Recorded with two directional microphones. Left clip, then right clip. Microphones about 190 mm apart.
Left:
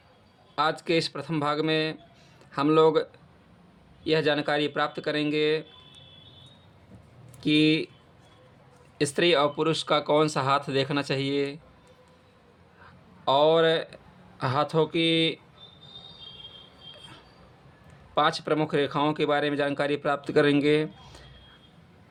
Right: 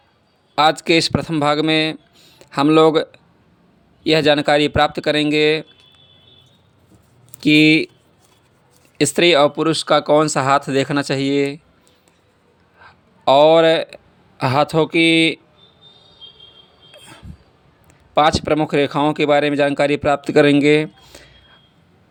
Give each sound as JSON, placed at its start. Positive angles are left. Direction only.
{"t": 0.5, "sound": "speech", "side_deg": -40}
{"t": 7.3, "sound": "speech", "side_deg": -40}
{"t": 9.0, "sound": "speech", "side_deg": -40}
{"t": 12.8, "sound": "speech", "side_deg": -40}
{"t": 18.1, "sound": "speech", "side_deg": -40}